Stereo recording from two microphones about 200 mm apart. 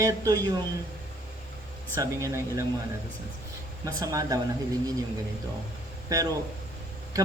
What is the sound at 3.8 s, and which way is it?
Speech, 15° right (ahead or behind).